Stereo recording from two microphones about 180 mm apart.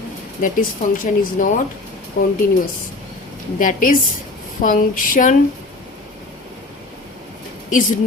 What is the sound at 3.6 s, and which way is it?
A woman's voice, 50° left (ahead or behind).